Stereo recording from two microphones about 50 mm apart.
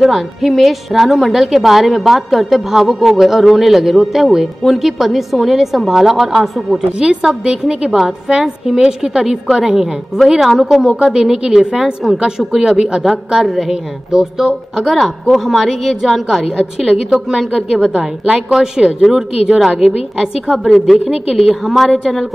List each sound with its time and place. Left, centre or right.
0.0 s a woman's voice: centre
7.0 s a woman's voice: centre
17.9 s a woman's voice: centre